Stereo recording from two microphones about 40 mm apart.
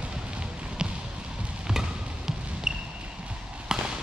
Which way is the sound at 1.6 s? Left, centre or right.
Centre.